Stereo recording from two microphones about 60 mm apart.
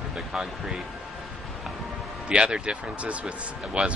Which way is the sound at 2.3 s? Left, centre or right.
Centre.